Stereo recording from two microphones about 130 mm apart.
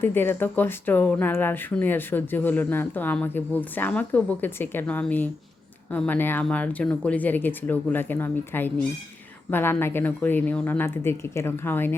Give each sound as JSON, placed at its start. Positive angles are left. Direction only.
{"t": 0.0, "sound": "speech", "side_deg": 15}